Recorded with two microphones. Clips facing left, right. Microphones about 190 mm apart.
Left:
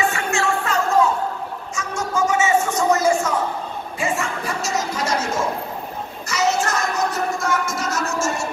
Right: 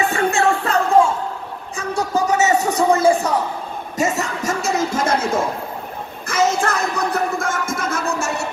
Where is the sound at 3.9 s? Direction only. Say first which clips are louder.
Right 4 dB; 40° right (ahead or behind).